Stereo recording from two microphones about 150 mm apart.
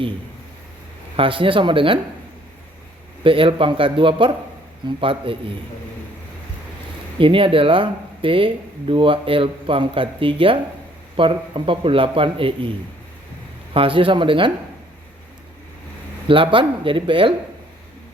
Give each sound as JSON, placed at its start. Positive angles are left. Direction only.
{"t": 1.1, "sound": "speech", "side_deg": -35}
{"t": 3.2, "sound": "speech", "side_deg": -35}
{"t": 7.2, "sound": "speech", "side_deg": -35}
{"t": 13.7, "sound": "speech", "side_deg": -35}
{"t": 16.2, "sound": "speech", "side_deg": -35}